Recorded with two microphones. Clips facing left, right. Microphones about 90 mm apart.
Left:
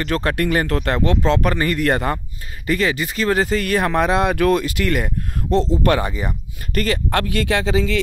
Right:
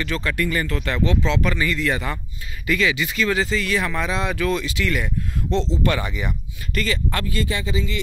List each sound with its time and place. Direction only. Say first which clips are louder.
0.0 s speech: left 4 dB; 55° left (ahead or behind)
2.6 s speech: left 2 dB; 40° left (ahead or behind); by 8.0 s 90° left